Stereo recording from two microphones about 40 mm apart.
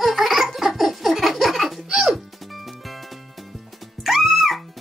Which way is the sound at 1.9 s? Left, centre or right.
Centre.